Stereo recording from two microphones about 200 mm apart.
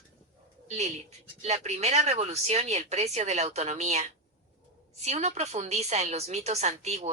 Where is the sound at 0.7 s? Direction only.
35° right (ahead or behind).